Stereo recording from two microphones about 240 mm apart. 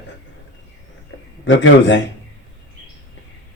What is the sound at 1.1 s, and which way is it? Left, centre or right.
Speech, left.